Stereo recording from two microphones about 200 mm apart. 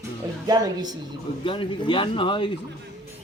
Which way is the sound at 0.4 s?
20° right (ahead or behind).